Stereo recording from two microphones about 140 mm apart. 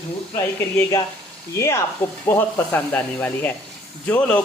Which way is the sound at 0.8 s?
25° left (ahead or behind).